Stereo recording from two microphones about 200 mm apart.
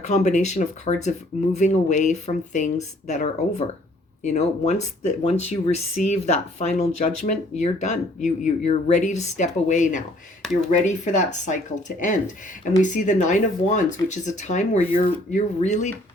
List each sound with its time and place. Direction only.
0.0 s speech: 35° left (ahead or behind)